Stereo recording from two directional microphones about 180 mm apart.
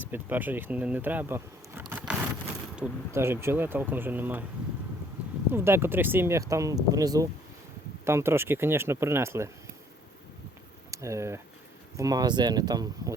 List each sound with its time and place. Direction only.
0.0 s speech: 10° right (ahead or behind)
5.5 s speech: 15° right (ahead or behind)
10.9 s speech: 15° right (ahead or behind)